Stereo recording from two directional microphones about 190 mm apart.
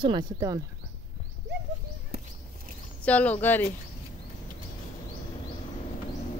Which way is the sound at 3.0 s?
5° left (ahead or behind).